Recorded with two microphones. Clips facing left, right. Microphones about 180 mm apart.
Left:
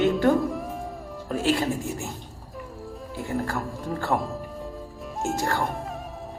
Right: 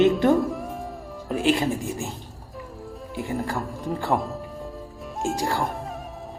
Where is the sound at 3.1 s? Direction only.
20° right (ahead or behind).